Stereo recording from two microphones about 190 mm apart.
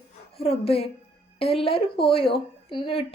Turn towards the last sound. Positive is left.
turn(degrees=25)  # may be behind; listen again after turning